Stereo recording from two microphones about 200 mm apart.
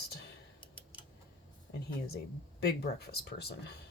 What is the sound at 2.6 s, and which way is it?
Speech, 50° left (ahead or behind).